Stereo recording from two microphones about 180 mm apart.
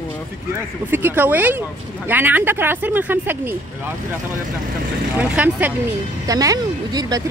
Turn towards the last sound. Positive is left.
turn(degrees=-20)  # may be behind; listen again after turning